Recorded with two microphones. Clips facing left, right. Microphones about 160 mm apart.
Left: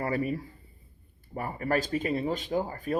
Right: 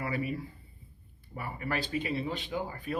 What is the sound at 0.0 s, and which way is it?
Speech, 40° left (ahead or behind).